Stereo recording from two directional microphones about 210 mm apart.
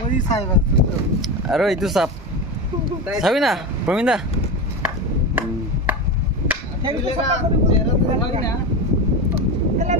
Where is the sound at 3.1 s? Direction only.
Centre (ahead or behind).